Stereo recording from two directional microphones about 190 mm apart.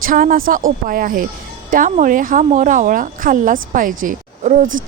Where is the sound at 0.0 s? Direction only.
45° right (ahead or behind).